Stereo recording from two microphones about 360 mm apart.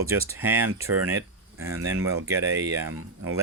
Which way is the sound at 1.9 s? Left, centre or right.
Right.